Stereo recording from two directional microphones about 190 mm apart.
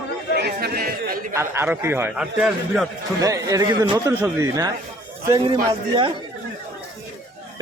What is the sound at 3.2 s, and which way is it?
A man's voice, 15° right (ahead or behind).